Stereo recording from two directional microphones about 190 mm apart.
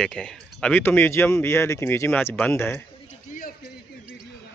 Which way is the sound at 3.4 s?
45° left (ahead or behind).